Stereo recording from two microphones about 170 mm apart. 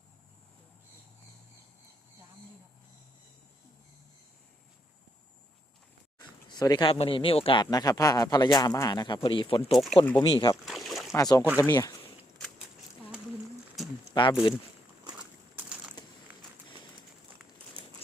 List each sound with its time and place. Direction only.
6.1 s speech: 25° left (ahead or behind)
9.7 s speech: centre (ahead or behind)
10.2 s speech: 25° left (ahead or behind)
10.7 s boat: centre (ahead or behind)
11.1 s speech: 20° left (ahead or behind)
14.1 s speech: 30° left (ahead or behind)
15.5 s a sound: 5° right (ahead or behind)